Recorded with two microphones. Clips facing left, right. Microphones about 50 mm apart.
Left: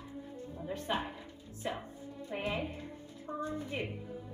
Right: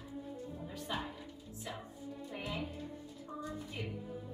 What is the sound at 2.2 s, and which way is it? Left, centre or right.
A woman's voice, left.